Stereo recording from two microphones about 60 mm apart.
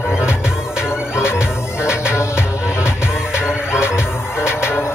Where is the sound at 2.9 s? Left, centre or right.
Left.